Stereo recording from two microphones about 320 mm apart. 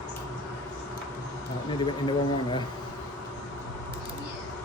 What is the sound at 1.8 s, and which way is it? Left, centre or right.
Speech, centre.